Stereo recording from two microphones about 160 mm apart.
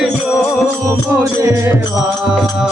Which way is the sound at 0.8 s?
15° right (ahead or behind).